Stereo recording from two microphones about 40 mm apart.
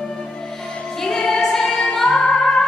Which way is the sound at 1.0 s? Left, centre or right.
Centre.